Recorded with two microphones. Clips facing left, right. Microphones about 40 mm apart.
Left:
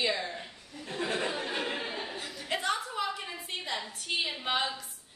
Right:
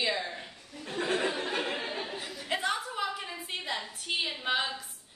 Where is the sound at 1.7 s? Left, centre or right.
Centre.